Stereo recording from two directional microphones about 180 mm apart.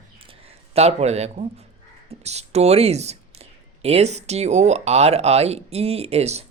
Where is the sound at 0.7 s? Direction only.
35° right (ahead or behind).